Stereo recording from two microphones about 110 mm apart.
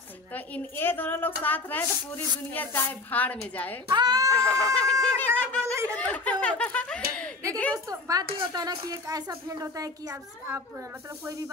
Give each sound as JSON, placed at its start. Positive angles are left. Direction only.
{"t": 0.3, "sound": "a woman's voice", "side_deg": 20}
{"t": 3.9, "sound": "speech", "side_deg": -40}
{"t": 4.4, "sound": "a woman's voice", "side_deg": 10}
{"t": 5.6, "sound": "speech", "side_deg": -25}
{"t": 5.9, "sound": "snicker", "side_deg": 15}
{"t": 7.7, "sound": "speech", "side_deg": -35}